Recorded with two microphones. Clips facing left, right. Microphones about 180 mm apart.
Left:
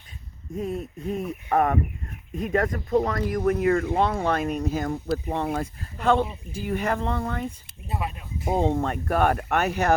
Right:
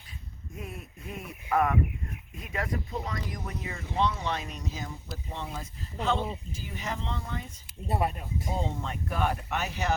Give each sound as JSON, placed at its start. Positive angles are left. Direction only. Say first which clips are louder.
{"t": 0.5, "sound": "speech", "louder": "left 13 dB", "side_deg": 40}
{"t": 7.9, "sound": "speech", "louder": "right 2 dB", "side_deg": -30}
{"t": 8.4, "sound": "speech", "louder": "left 11 dB", "side_deg": 55}